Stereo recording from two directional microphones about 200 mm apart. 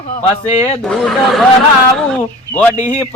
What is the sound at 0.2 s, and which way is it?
Speech, 35° left (ahead or behind).